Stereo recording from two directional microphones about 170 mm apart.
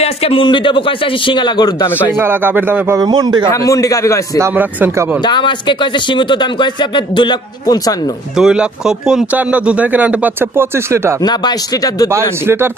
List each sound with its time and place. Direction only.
0.0 s speech: 35° left (ahead or behind)
2.1 s speech: 15° right (ahead or behind)
3.0 s a man's voice: 25° right (ahead or behind)
3.4 s speech: 20° left (ahead or behind)
4.4 s speech: 10° right (ahead or behind)
5.2 s speech: 25° left (ahead or behind)
8.4 s speech: 5° right (ahead or behind)
11.2 s speech: 25° left (ahead or behind)
12.1 s speech: 15° right (ahead or behind)